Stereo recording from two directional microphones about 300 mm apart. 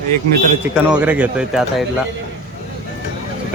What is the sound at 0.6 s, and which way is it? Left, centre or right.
Speech, centre.